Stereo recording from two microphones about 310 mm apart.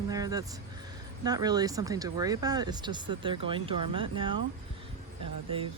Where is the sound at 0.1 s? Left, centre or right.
Centre.